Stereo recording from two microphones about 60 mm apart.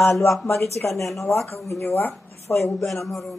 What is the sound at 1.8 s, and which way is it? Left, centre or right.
Speech, left.